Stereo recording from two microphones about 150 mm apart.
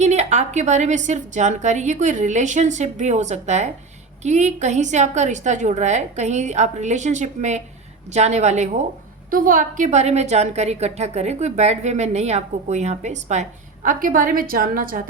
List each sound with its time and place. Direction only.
0.0 s a woman's voice: 50° right (ahead or behind)
9.3 s a woman's voice: 65° right (ahead or behind)